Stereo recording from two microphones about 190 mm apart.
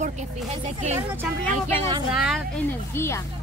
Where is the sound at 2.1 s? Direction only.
Centre (ahead or behind).